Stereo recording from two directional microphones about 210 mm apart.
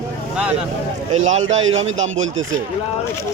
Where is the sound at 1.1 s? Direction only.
70° right (ahead or behind).